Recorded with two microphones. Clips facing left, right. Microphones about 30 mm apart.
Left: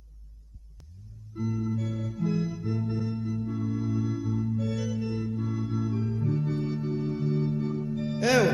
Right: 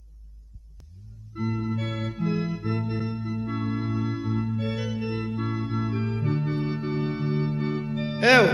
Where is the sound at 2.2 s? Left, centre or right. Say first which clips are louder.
Right 1 dB; right.